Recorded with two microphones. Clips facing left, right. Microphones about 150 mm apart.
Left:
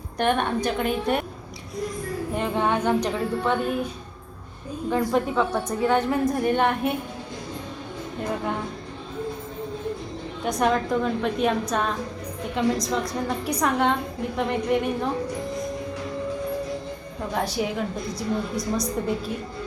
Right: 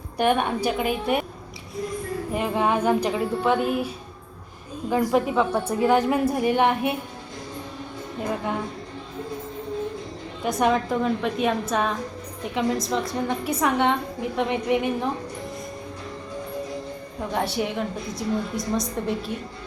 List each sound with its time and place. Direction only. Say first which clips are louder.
0.2 s a woman's voice: right 1 dB; 5° right (ahead or behind)
2.3 s a woman's voice: right 1 dB; 5° right (ahead or behind)
5.1 s a woman's voice: right 1 dB; 10° right (ahead or behind)
8.2 s a woman's voice: even; centre (ahead or behind)
10.4 s a woman's voice: right 1 dB; centre (ahead or behind)
17.3 s a woman's voice: even; centre (ahead or behind)